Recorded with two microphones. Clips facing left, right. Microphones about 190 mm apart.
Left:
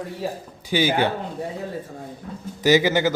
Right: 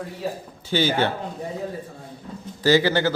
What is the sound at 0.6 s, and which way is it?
Speech, 15° left (ahead or behind).